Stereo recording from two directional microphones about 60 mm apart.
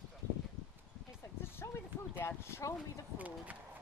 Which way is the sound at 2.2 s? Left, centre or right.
Left.